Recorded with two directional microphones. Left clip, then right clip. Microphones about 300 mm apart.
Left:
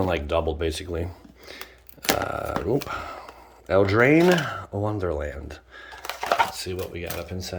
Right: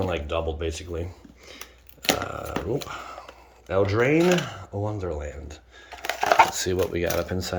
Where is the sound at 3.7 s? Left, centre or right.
Centre.